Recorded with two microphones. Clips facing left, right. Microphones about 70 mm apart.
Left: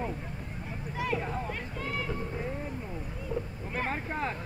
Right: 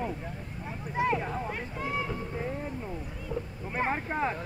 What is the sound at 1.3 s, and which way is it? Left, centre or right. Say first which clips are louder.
Speech: right 1 dB; centre.